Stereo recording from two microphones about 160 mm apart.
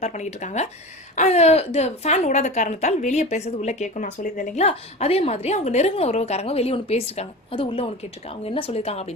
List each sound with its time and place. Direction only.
0.0 s a woman's voice: 45° left (ahead or behind)